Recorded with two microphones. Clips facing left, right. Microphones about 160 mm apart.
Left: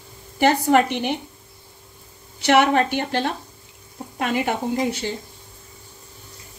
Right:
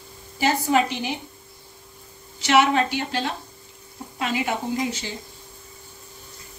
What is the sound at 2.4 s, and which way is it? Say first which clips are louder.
A woman's voice: left 2 dB; 60° left (ahead or behind).